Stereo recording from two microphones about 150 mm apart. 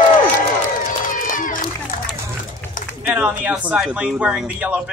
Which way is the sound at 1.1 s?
65° left (ahead or behind).